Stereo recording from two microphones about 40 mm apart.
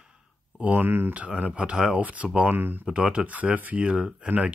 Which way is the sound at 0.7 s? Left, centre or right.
Right.